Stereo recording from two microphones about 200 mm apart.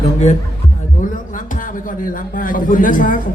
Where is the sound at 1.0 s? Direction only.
40° left (ahead or behind).